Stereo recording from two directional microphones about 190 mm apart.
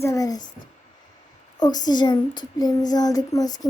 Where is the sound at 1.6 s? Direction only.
20° left (ahead or behind).